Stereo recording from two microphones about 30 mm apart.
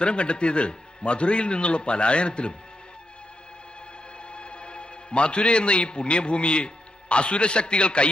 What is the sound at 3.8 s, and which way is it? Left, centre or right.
A man's voice, left.